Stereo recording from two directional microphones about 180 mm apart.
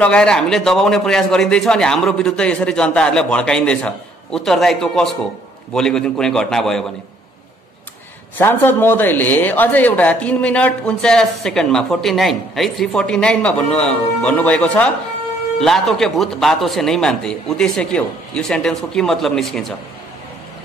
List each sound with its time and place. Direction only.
0.0 s a man's voice: 5° left (ahead or behind)
8.4 s a man's voice: 10° left (ahead or behind)